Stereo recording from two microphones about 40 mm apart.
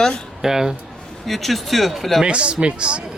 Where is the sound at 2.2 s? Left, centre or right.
Right.